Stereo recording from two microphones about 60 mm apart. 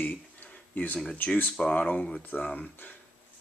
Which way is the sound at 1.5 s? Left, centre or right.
Centre.